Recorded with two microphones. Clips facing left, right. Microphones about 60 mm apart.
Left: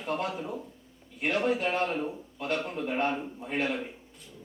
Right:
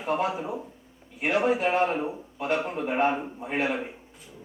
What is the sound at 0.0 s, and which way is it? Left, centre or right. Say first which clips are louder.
A man's voice: right 5 dB; centre.